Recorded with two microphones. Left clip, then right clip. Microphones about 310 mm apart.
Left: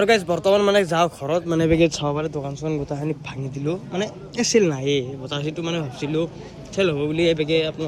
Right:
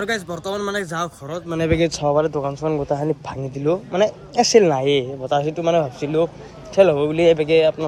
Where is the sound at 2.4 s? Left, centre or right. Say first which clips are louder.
Right 5 dB; right.